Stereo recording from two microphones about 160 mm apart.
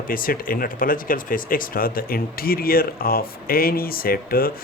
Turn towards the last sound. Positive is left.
turn(degrees=65)  # may be behind; listen again after turning